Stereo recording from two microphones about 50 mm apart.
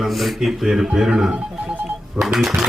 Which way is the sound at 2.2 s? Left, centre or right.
Centre.